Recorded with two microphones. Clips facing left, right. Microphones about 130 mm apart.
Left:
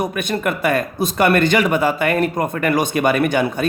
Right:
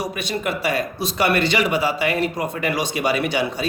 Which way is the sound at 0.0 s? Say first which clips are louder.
Left 4 dB; 50° left (ahead or behind).